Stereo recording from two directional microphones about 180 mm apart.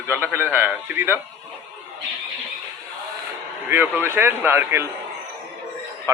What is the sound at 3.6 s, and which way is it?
A man's voice, 10° right (ahead or behind).